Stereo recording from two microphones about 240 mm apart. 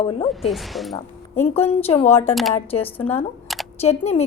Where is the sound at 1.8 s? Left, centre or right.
Left.